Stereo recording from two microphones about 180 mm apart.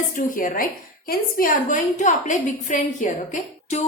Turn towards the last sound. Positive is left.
turn(degrees=45)  # may be behind; listen again after turning